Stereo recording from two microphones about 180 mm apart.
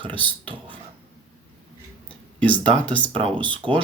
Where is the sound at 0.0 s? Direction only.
30° right (ahead or behind).